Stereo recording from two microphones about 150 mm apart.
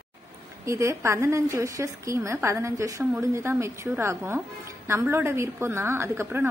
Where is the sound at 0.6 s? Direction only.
20° right (ahead or behind).